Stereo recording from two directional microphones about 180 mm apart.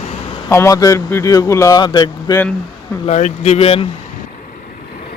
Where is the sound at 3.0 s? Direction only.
40° left (ahead or behind).